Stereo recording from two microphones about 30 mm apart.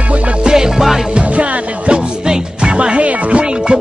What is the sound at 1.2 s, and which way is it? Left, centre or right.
Music, right.